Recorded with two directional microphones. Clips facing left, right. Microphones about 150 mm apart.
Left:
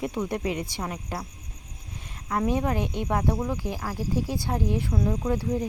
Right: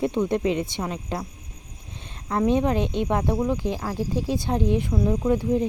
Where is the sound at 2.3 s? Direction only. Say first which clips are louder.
Right 4 dB; 20° right (ahead or behind).